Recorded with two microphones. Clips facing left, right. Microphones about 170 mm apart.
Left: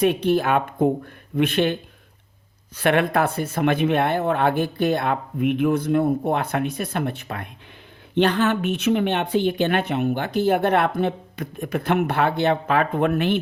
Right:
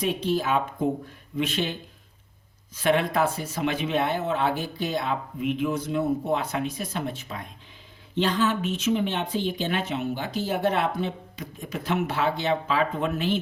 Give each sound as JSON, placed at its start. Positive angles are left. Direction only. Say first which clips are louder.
{"t": 0.0, "sound": "speech", "louder": "left 6 dB", "side_deg": 65}